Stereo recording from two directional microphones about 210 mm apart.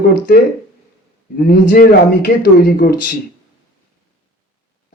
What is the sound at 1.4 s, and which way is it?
Speech, 40° left (ahead or behind).